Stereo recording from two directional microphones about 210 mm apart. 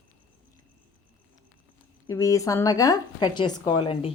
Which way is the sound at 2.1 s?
15° left (ahead or behind).